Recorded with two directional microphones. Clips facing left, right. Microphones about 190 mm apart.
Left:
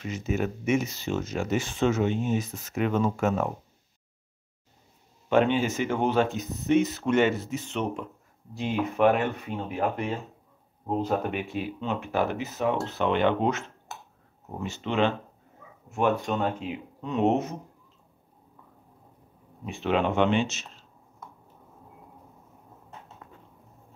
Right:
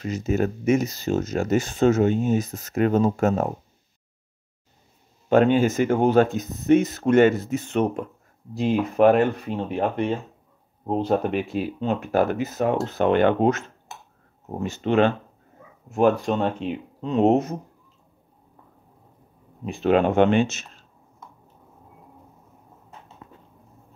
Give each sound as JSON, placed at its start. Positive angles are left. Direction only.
{"t": 0.0, "sound": "speech", "side_deg": -40}
{"t": 5.3, "sound": "speech", "side_deg": -45}
{"t": 8.5, "sound": "speech", "side_deg": -40}
{"t": 15.9, "sound": "speech", "side_deg": -35}
{"t": 19.7, "sound": "speech", "side_deg": -45}